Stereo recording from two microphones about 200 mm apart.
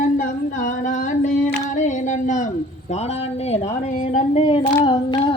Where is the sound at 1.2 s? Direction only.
40° left (ahead or behind).